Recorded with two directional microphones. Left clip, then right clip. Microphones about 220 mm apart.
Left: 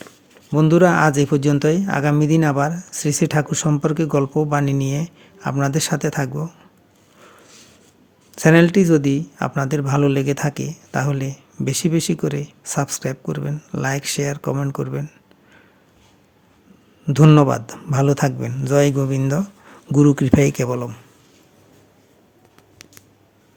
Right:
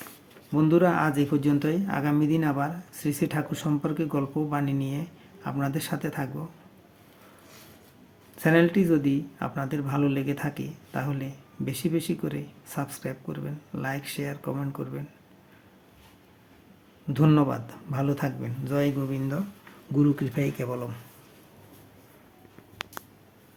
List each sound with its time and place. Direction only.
0.5 s speech: 45° left (ahead or behind)
8.4 s speech: 45° left (ahead or behind)
17.1 s speech: 45° left (ahead or behind)